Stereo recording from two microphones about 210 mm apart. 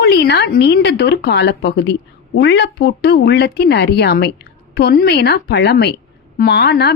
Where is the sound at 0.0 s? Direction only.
50° left (ahead or behind).